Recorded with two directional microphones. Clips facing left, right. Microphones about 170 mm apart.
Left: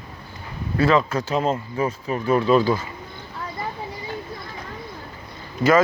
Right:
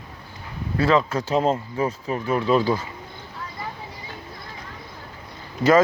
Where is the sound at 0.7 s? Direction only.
25° right (ahead or behind).